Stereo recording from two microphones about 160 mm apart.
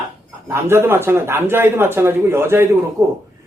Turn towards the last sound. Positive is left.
turn(degrees=-15)  # may be behind; listen again after turning